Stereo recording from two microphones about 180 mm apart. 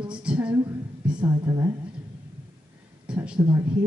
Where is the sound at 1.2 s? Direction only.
25° right (ahead or behind).